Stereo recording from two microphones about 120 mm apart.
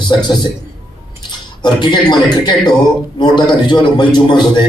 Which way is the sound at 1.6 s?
40° left (ahead or behind).